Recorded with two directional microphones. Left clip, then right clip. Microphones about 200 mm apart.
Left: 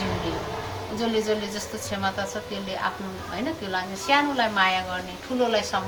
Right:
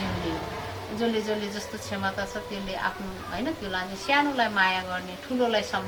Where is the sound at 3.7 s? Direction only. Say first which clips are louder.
Left 2 dB; 5° left (ahead or behind).